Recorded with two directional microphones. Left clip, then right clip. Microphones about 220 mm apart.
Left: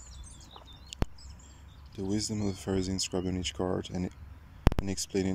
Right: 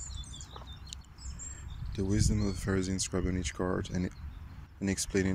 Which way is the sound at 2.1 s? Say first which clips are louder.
Left 1 dB; 10° left (ahead or behind).